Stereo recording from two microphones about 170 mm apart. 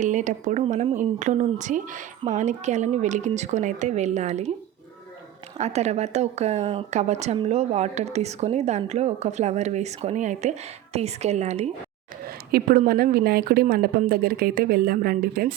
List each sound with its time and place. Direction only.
0.0 s speech: 45° right (ahead or behind)
5.5 s speech: 40° right (ahead or behind)
12.2 s speech: 60° right (ahead or behind)